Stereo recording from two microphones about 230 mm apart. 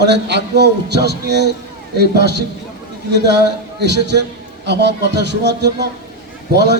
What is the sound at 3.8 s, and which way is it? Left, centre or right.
A man's voice, right.